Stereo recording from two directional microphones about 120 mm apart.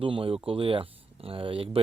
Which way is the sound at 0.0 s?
50° right (ahead or behind).